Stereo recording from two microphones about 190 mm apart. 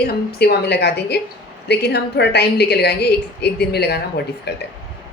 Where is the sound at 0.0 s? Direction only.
55° left (ahead or behind).